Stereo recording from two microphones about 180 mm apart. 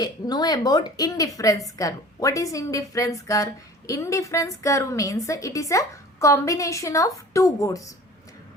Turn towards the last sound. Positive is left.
turn(degrees=20)  # may be behind; listen again after turning